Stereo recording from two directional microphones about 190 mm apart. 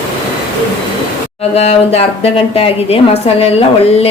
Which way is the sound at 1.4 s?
35° left (ahead or behind).